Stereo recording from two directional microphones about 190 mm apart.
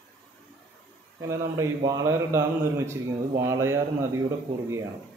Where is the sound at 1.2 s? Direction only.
15° right (ahead or behind).